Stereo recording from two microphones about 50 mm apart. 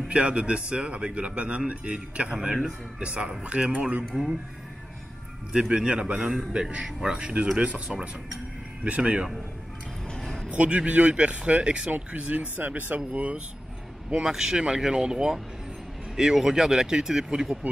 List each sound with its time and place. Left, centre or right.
0.1 s a man's voice: right
2.5 s a man's voice: centre
4.1 s speech: centre
5.5 s a man's voice: centre
8.8 s a man's voice: right
10.2 s a sound: centre
10.5 s a man's voice: right
12.6 s speech: right
14.2 s speech: centre